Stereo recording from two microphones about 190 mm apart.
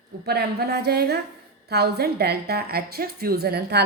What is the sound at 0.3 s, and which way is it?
A woman's voice, 55° right (ahead or behind).